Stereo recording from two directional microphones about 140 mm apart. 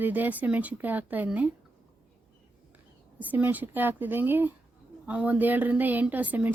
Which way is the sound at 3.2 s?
10° right (ahead or behind).